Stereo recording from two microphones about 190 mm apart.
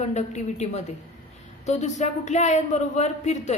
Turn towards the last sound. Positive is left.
turn(degrees=35)  # may be behind; listen again after turning